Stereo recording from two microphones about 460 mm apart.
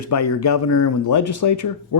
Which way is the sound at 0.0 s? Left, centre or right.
Left.